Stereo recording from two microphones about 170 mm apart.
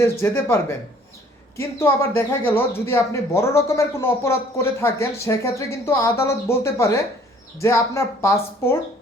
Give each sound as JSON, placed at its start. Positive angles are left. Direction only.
{"t": 0.0, "sound": "speech", "side_deg": 15}